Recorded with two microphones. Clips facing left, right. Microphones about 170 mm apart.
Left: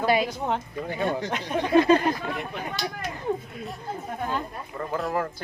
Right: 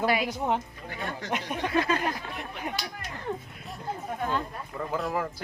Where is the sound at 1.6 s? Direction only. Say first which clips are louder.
Left 9 dB; 25° left (ahead or behind).